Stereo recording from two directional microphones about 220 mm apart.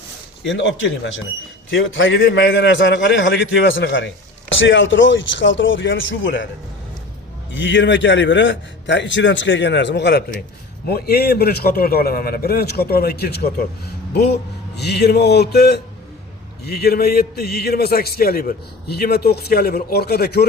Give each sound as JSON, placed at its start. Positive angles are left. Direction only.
{"t": 0.4, "sound": "a man's voice", "side_deg": 55}
{"t": 7.5, "sound": "a man's voice", "side_deg": 55}
{"t": 14.8, "sound": "a man's voice", "side_deg": 50}